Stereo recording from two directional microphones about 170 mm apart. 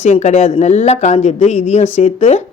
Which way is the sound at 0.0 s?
40° left (ahead or behind).